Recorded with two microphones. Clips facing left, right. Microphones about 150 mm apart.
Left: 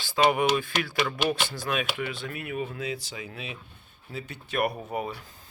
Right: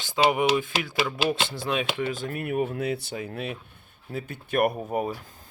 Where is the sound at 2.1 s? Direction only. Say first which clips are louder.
Right 5 dB; 45° right (ahead or behind).